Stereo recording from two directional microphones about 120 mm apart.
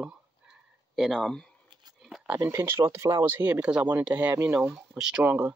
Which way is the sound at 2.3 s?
20° right (ahead or behind).